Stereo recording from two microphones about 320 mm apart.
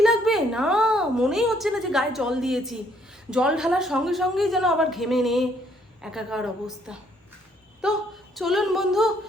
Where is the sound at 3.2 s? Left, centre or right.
Centre.